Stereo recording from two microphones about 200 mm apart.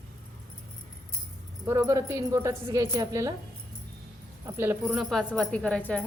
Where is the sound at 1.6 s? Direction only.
15° right (ahead or behind).